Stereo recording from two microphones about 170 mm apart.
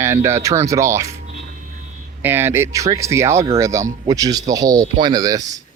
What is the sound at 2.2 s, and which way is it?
Speech, 15° right (ahead or behind).